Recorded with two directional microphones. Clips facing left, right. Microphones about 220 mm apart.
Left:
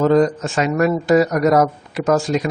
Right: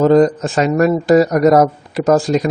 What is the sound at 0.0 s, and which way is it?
Speech, 35° right (ahead or behind).